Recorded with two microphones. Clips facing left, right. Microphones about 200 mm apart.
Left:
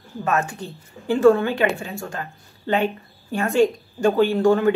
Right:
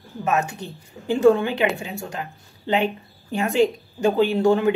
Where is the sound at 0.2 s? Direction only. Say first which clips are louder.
Even; 20° right (ahead or behind).